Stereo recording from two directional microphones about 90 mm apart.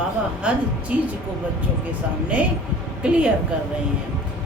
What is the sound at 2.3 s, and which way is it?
Speech, 15° right (ahead or behind).